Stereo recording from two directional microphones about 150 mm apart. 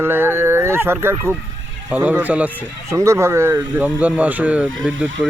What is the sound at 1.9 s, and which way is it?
Speech, 10° right (ahead or behind).